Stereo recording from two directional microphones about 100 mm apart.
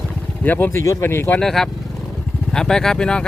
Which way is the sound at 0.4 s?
20° left (ahead or behind).